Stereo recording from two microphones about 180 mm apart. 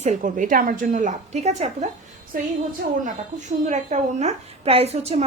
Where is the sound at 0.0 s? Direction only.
45° right (ahead or behind).